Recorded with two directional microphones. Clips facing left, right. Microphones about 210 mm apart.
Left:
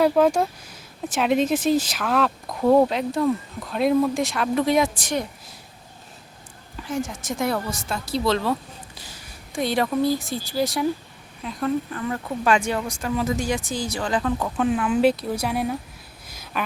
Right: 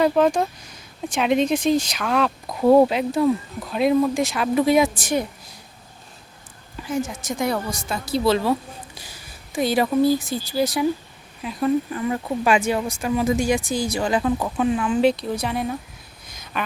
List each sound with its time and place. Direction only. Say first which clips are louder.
0.0 s speech: even; 5° left (ahead or behind)
6.8 s speech: right 2 dB; centre (ahead or behind)
14.7 s speech: even; 5° left (ahead or behind)
16.2 s a sound: even; 5° left (ahead or behind)